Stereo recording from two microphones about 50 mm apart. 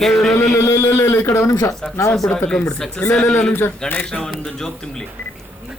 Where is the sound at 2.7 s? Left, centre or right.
Centre.